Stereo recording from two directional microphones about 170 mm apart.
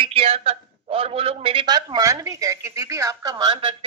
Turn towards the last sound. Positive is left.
turn(degrees=-25)  # may be behind; listen again after turning